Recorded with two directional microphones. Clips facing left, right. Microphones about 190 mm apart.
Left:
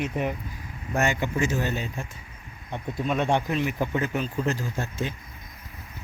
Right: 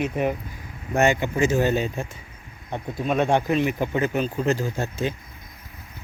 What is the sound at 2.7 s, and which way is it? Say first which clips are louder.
Speech: right 3 dB; 45° right (ahead or behind).